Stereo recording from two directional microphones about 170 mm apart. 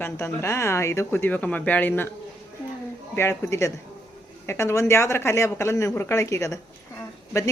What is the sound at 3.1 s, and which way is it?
Speech, 15° left (ahead or behind).